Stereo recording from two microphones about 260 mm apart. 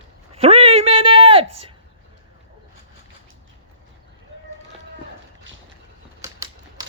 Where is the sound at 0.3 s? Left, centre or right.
Right.